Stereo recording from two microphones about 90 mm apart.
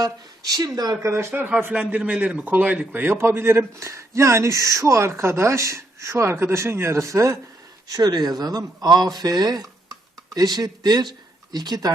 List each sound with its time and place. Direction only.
0.0 s speech: 45° right (ahead or behind)
1.1 s speech: 25° right (ahead or behind)
7.9 s speech: 45° right (ahead or behind)